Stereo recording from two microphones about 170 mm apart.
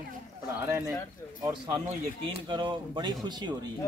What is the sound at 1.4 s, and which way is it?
Speech, 25° right (ahead or behind).